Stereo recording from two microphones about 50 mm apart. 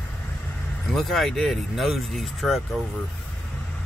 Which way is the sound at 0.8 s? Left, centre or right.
Centre.